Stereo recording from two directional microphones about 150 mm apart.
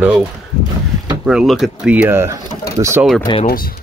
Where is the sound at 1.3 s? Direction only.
Centre (ahead or behind); by 3.0 s 20° right (ahead or behind).